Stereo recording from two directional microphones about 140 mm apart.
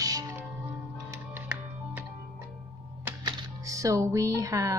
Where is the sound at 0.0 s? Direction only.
25° right (ahead or behind).